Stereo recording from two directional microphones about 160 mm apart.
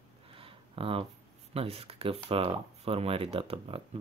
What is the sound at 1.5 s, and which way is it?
Speech, 40° right (ahead or behind).